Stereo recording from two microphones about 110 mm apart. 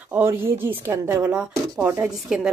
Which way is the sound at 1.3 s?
5° right (ahead or behind).